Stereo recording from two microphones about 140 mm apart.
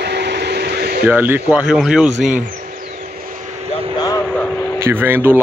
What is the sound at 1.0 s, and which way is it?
A man's voice, 15° right (ahead or behind).